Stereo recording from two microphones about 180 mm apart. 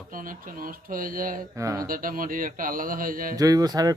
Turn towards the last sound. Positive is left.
turn(degrees=-20)  # may be behind; listen again after turning